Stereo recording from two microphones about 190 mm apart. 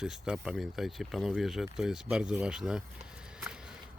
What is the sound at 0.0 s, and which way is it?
Speech, 5° right (ahead or behind).